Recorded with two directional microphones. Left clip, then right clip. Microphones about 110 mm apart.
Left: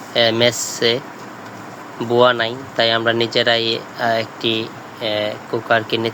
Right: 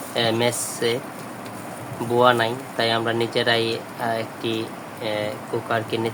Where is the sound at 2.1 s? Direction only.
20° left (ahead or behind).